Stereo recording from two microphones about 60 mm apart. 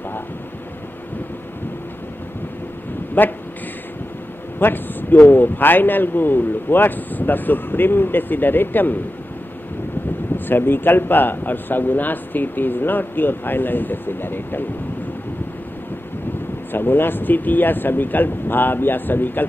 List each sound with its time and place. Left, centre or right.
3.2 s speech: left
4.6 s speech: left
10.3 s speech: left
16.7 s speech: left